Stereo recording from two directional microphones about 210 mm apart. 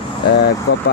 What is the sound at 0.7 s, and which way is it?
Speech, 50° left (ahead or behind).